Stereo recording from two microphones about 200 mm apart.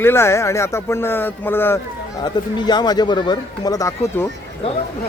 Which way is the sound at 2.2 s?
20° left (ahead or behind).